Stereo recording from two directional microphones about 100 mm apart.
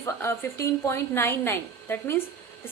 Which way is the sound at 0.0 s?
25° left (ahead or behind).